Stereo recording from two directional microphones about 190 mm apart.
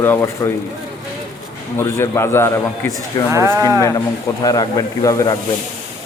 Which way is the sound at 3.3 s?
15° right (ahead or behind).